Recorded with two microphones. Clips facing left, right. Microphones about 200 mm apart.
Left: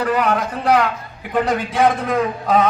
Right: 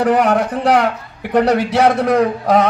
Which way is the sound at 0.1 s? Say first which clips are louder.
Right 5 dB; 70° right (ahead or behind).